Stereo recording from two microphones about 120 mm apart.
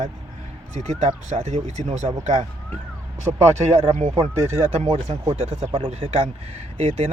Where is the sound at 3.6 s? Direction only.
80° right.